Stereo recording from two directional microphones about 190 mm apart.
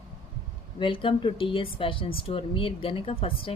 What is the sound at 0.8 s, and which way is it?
Speech, 25° left (ahead or behind).